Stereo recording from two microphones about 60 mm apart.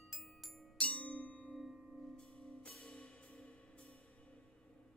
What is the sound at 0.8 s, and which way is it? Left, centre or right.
Marimba, centre.